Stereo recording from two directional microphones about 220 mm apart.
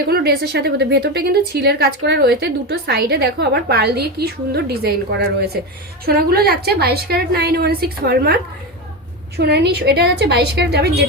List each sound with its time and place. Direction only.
0.1 s a woman's voice: 45° right (ahead or behind)
6.1 s a woman's voice: 45° right (ahead or behind)
9.4 s a woman's voice: 50° right (ahead or behind)